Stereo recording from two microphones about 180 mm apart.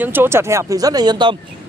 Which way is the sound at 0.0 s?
10° right (ahead or behind).